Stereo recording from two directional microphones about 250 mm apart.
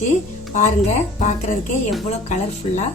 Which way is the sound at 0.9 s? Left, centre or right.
Left.